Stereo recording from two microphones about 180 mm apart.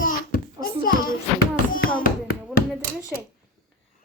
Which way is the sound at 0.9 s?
50° left (ahead or behind).